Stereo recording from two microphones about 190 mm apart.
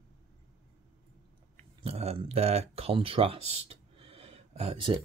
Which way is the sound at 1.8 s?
30° right (ahead or behind).